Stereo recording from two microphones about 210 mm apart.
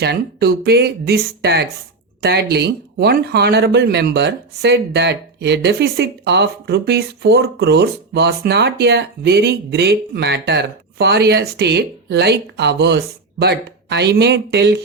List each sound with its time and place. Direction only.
0.0 s speech: 50° right (ahead or behind)